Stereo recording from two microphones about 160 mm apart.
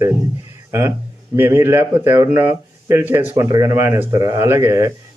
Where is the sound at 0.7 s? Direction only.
15° right (ahead or behind).